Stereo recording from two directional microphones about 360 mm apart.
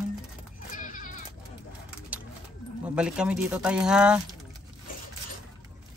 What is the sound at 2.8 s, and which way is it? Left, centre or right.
Speech, centre.